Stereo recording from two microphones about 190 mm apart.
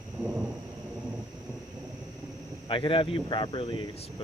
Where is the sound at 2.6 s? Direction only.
25° left (ahead or behind).